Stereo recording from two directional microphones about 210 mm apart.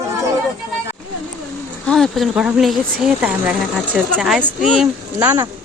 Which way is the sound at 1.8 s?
Centre (ahead or behind).